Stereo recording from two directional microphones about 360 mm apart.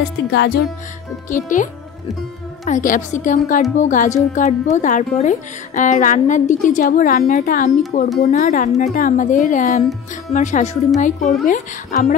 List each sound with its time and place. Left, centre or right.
0.0 s speech: left